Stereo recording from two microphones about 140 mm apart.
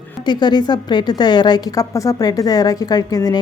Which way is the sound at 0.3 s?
30° left (ahead or behind).